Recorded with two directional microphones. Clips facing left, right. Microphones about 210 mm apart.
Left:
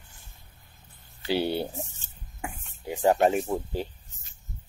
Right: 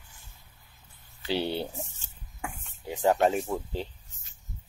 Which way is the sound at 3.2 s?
5° left (ahead or behind).